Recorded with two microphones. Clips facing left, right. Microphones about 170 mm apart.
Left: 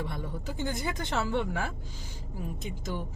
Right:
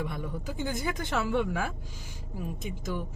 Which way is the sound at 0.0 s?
25° left (ahead or behind).